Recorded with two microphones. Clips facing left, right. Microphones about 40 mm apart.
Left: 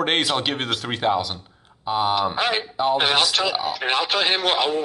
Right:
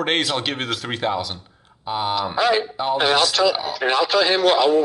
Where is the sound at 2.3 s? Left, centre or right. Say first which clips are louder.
Right 4 dB; left.